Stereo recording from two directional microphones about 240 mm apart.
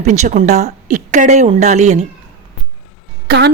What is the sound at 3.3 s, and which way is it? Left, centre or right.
Speech, right.